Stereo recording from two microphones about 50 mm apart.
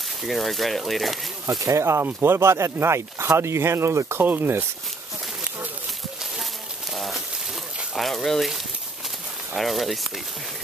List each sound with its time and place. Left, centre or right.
0.2 s speech: centre
1.6 s speech: right
4.2 s speech: right
7.0 s a sound: centre
7.9 s speech: centre
9.6 s speech: centre